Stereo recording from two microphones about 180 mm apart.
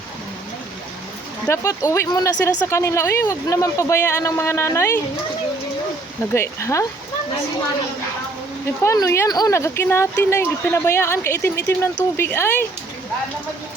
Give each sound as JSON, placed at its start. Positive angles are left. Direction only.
{"t": 1.5, "sound": "speech", "side_deg": 15}
{"t": 6.3, "sound": "speech", "side_deg": 15}
{"t": 8.8, "sound": "speech", "side_deg": 15}